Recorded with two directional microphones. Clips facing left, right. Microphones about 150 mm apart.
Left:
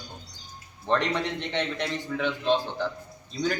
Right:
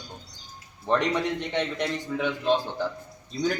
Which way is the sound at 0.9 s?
10° right (ahead or behind).